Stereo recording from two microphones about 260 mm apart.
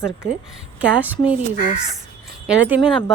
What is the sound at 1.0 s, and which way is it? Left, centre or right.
Speech, centre.